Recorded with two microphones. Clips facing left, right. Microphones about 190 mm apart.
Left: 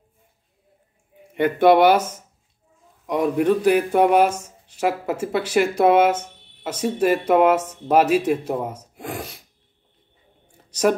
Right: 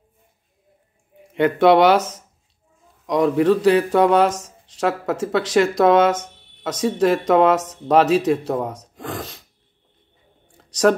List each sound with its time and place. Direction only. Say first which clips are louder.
1.4 s speech: right 1 dB; 75° right (ahead or behind)
2.0 s a man's voice: right 1 dB; 10° left (ahead or behind)
3.3 s speech: right 2 dB; 80° right
3.7 s speech: right 1 dB; 10° left (ahead or behind)